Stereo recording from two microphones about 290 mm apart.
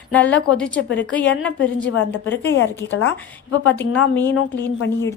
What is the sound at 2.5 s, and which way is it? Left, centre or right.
Speech, left.